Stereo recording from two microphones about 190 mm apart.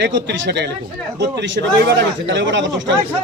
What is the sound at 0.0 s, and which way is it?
Speech, 70° right (ahead or behind).